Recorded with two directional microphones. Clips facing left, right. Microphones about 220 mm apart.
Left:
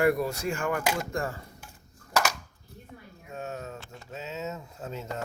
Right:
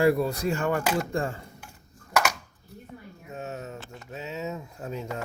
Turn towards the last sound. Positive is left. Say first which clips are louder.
# right 3 dB
turn(degrees=-15)  # may be behind; listen again after turning